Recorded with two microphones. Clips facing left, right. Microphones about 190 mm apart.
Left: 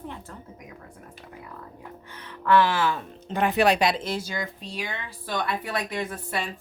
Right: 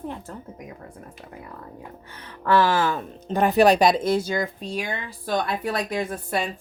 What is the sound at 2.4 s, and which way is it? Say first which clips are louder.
Speech: right 1 dB; 40° right (ahead or behind).